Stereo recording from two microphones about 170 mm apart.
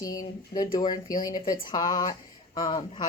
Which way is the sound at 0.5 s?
25° left (ahead or behind).